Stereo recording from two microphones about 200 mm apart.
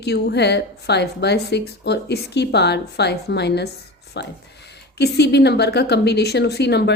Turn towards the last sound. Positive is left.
turn(degrees=55)  # may be behind; listen again after turning